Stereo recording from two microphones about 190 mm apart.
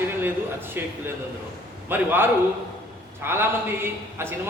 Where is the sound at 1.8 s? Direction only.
10° right (ahead or behind).